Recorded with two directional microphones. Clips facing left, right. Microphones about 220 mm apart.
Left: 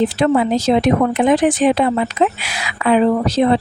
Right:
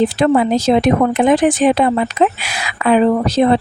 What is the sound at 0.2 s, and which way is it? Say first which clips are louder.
Speech: right 2 dB; 50° right (ahead or behind).